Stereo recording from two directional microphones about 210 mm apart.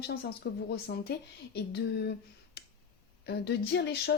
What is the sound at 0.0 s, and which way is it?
A woman's voice, 50° left (ahead or behind).